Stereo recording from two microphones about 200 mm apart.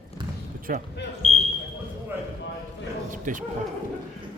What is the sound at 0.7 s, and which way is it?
Speech, 45° right (ahead or behind).